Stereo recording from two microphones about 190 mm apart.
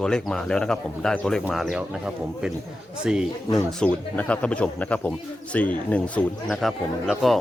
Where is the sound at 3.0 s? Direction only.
5° right (ahead or behind).